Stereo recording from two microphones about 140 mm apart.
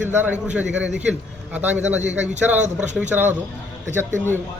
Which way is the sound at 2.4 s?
10° right (ahead or behind).